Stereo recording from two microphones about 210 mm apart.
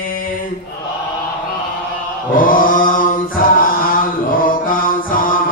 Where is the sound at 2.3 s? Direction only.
40° left (ahead or behind).